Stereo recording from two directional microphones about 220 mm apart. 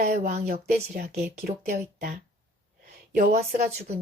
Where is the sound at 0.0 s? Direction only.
40° right (ahead or behind).